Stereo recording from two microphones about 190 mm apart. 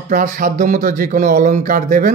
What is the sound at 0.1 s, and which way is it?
Speech, 45° right (ahead or behind).